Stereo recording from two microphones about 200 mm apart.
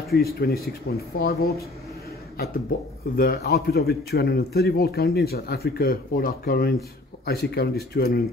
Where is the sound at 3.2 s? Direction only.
50° left (ahead or behind).